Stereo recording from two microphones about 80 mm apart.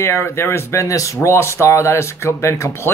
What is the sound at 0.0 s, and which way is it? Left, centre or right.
Speech, left.